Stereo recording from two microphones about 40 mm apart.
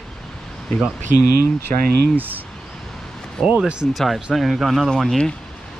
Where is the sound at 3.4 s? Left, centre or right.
Centre.